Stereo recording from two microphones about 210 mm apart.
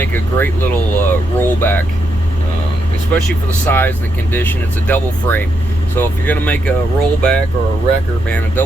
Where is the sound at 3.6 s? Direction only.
10° left (ahead or behind).